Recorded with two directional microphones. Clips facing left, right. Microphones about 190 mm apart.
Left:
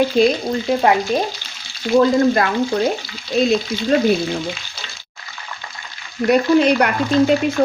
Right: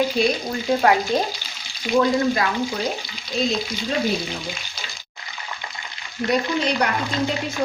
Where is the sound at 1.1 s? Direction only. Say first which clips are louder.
Left 2 dB; 15° left (ahead or behind).